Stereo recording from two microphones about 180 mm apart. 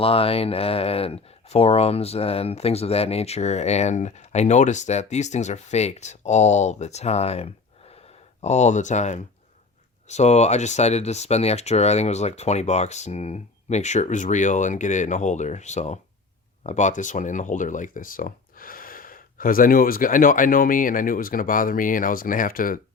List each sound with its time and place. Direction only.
0.0 s speech: 30° left (ahead or behind); by 22.8 s 50° left (ahead or behind)